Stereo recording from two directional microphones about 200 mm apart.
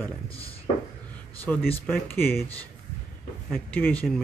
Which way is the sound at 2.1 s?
10° left (ahead or behind).